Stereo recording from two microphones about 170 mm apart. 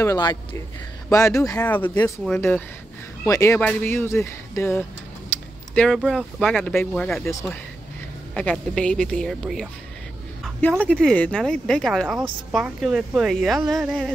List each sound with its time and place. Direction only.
0.0 s speech: 20° left (ahead or behind)
5.8 s speech: centre (ahead or behind)
8.4 s speech: 5° left (ahead or behind)
10.9 s speech: 5° left (ahead or behind)